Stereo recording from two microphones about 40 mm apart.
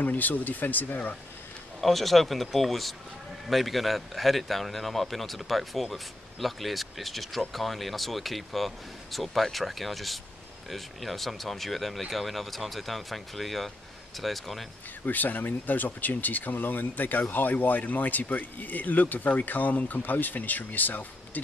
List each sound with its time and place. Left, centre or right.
0.0 s speech: left
1.8 s speech: centre
15.0 s speech: left